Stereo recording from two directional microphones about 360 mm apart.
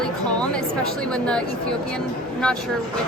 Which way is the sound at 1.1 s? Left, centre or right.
Centre.